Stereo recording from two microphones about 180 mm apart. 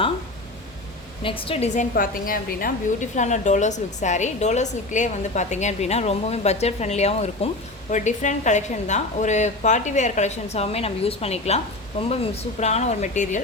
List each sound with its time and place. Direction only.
1.2 s a woman's voice: 30° left (ahead or behind)